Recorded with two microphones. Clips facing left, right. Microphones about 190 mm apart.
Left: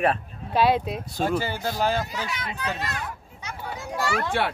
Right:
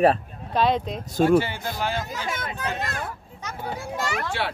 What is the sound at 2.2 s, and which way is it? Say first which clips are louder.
Speech: right 2 dB; 45° right (ahead or behind).